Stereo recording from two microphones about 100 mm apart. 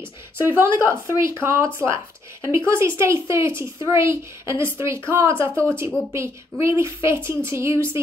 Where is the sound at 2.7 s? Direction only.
25° right (ahead or behind).